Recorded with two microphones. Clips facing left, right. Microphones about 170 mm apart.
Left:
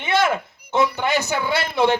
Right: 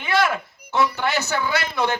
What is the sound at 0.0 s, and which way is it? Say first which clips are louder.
A man's voice: left 1 dB; 25° left (ahead or behind).